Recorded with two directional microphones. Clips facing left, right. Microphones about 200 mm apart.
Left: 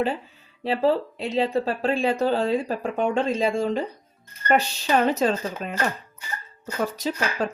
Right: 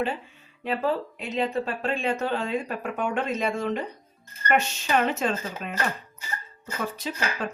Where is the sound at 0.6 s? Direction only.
30° left (ahead or behind).